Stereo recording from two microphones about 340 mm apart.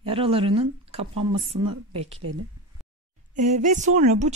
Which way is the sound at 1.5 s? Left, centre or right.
Right.